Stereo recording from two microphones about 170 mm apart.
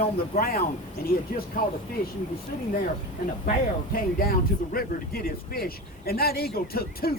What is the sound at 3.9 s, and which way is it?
A man's voice, 60° left (ahead or behind).